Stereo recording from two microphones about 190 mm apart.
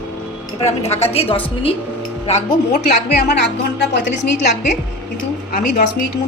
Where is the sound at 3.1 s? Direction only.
60° left (ahead or behind).